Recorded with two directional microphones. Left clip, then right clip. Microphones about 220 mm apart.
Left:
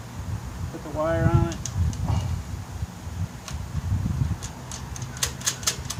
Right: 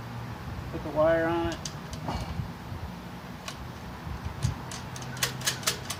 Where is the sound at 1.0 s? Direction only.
15° left (ahead or behind).